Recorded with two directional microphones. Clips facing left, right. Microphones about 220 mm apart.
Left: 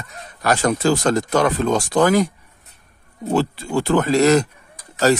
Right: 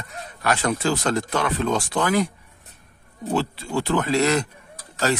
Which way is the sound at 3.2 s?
45° left (ahead or behind).